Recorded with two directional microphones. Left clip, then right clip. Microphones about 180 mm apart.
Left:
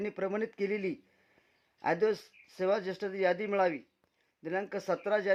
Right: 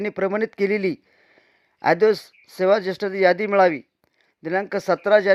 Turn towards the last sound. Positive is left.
turn(degrees=-35)  # may be behind; listen again after turning